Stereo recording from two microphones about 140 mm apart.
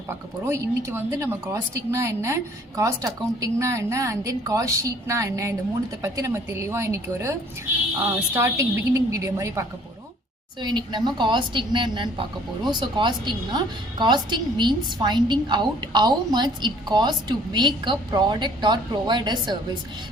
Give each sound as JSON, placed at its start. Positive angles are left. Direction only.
{"t": 0.1, "sound": "a woman's voice", "side_deg": -20}
{"t": 10.6, "sound": "a woman's voice", "side_deg": -30}